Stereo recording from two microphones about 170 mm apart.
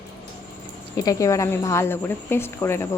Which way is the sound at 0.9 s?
20° left (ahead or behind).